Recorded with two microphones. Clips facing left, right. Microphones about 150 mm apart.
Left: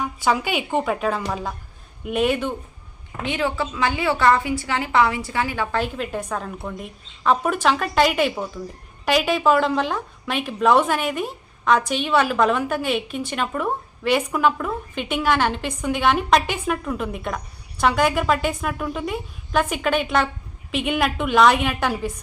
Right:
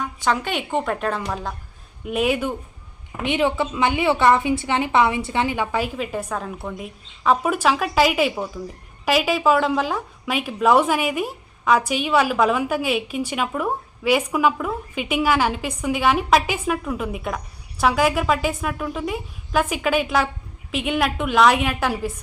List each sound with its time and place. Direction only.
0.0 s a woman's voice: 10° left (ahead or behind)
3.2 s a woman's voice: 20° right (ahead or behind)
5.7 s a woman's voice: 5° right (ahead or behind)